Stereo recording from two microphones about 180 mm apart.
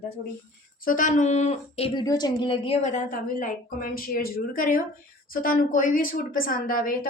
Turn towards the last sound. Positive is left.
turn(degrees=50)  # may be behind; listen again after turning